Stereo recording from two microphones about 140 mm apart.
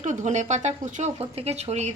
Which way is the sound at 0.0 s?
60° right (ahead or behind).